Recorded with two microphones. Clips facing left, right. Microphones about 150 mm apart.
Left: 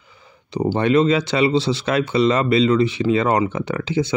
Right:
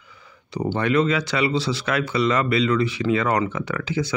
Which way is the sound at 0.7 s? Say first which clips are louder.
Left 4 dB; 25° left (ahead or behind).